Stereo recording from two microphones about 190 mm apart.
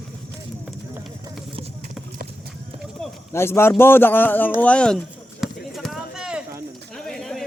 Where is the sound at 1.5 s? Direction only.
35° right (ahead or behind).